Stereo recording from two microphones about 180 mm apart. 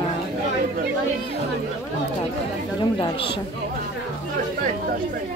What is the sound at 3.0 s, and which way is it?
Speech, 30° left (ahead or behind).